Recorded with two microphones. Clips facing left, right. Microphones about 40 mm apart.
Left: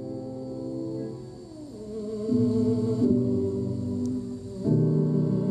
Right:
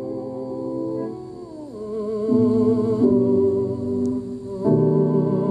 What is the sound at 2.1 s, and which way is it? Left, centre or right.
Music, right.